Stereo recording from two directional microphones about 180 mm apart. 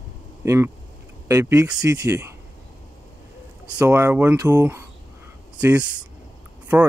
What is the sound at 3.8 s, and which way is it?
Speech, 15° right (ahead or behind).